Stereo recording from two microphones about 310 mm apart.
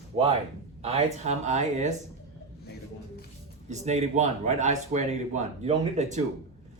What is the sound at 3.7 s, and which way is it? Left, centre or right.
Speech, right.